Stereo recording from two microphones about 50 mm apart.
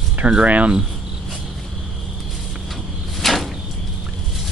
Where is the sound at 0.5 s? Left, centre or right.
Right.